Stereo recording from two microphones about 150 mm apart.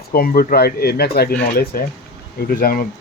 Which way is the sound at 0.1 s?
80° left.